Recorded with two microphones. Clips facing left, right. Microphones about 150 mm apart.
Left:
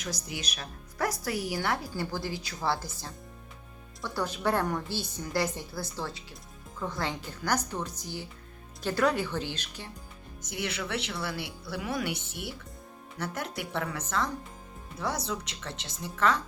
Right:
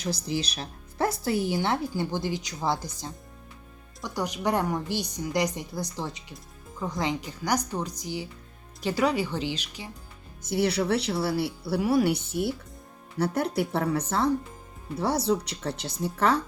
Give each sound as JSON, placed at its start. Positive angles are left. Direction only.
{"t": 0.0, "sound": "a woman's voice", "side_deg": -30}
{"t": 10.4, "sound": "speech", "side_deg": -35}